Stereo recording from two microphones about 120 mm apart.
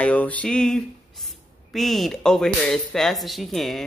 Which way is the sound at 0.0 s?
10° left (ahead or behind).